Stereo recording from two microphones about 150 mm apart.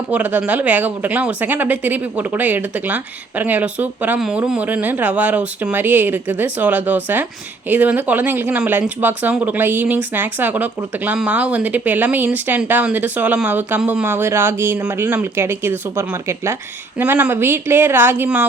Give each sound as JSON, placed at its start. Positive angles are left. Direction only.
{"t": 0.1, "sound": "speech", "side_deg": -10}